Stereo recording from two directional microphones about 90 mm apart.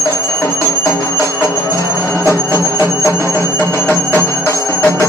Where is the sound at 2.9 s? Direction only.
35° left (ahead or behind).